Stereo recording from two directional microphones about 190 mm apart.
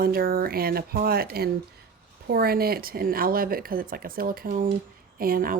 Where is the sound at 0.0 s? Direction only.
50° right (ahead or behind).